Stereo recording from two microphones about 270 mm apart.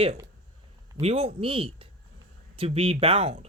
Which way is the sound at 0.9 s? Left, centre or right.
Right.